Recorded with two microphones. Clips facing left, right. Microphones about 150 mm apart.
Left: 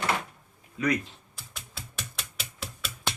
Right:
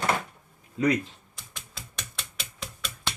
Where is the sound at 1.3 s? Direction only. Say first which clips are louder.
Left 1 dB; 5° left (ahead or behind).